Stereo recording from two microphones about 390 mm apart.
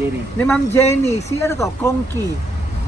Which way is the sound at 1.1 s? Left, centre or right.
Centre.